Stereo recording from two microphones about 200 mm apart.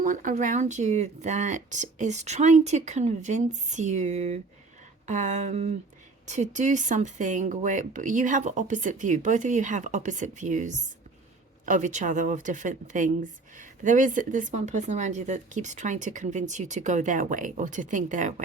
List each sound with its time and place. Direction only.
0.0 s speech: 40° right (ahead or behind)